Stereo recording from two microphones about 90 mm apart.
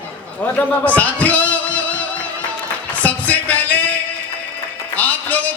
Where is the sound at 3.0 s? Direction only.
15° left (ahead or behind).